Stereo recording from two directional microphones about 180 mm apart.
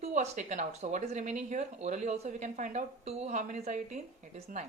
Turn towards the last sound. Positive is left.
turn(degrees=-45)  # may be behind; listen again after turning